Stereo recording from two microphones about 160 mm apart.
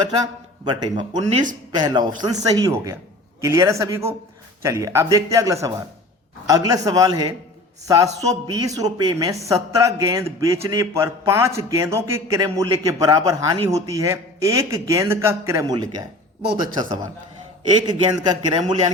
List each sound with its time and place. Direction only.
0.2 s a man's voice: 25° right (ahead or behind)